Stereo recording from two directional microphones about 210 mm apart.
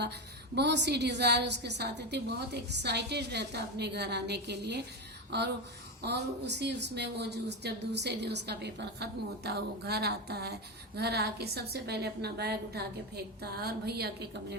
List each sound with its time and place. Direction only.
0.5 s a woman's voice: 55° right (ahead or behind)